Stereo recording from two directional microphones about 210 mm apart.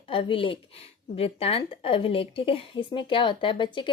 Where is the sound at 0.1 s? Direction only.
25° left (ahead or behind).